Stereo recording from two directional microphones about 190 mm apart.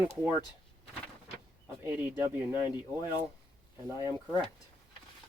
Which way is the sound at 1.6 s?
10° right (ahead or behind).